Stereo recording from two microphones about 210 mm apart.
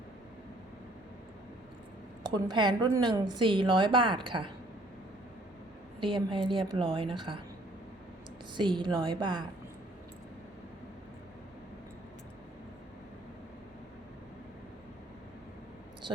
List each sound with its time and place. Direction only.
2.3 s a woman's voice: 20° right (ahead or behind)
6.0 s a woman's voice: 25° right (ahead or behind)
8.5 s a woman's voice: 20° right (ahead or behind)